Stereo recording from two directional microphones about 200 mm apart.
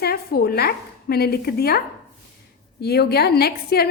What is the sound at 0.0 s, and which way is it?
A woman's voice, 50° left (ahead or behind).